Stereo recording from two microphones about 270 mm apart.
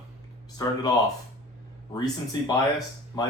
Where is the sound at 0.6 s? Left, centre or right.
Centre.